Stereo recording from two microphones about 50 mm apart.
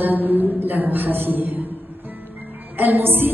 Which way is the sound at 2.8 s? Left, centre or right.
Right.